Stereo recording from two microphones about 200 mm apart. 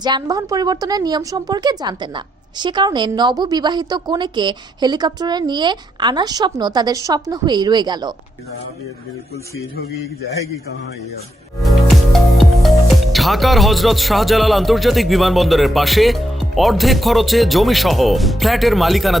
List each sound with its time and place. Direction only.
0.0 s a woman's voice: 20° right (ahead or behind)
9.3 s a man's voice: 50° left (ahead or behind)
11.6 s music: centre (ahead or behind)
13.1 s speech: centre (ahead or behind)